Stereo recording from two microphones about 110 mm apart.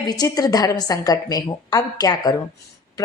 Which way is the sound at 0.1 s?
35° left (ahead or behind).